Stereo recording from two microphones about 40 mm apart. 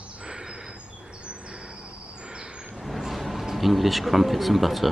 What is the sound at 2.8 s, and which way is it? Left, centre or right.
Vehicle, centre.